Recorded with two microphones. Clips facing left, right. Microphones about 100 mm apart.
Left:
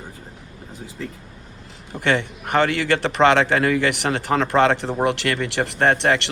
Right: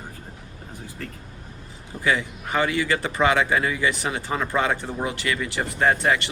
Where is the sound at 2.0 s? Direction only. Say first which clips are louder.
Left 3 dB; 65° left (ahead or behind).